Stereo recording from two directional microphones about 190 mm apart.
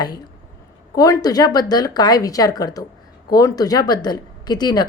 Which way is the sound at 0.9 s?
20° left (ahead or behind).